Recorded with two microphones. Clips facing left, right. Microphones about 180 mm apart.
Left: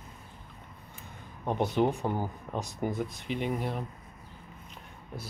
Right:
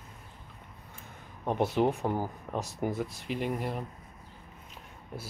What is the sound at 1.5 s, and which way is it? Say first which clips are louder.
Speech: even; centre (ahead or behind).